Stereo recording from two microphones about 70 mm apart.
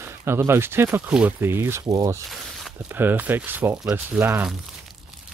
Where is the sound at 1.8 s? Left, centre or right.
Right.